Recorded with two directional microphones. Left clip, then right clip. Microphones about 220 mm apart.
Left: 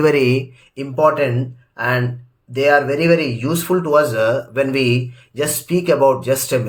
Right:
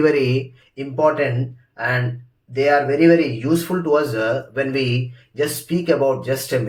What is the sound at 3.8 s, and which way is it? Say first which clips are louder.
Speech: left 3 dB; 50° left (ahead or behind).